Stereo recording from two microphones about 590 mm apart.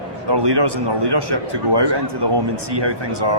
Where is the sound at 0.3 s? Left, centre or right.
Right.